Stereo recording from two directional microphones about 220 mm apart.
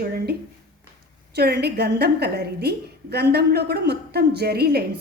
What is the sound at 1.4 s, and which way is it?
A woman's voice, 50° right (ahead or behind).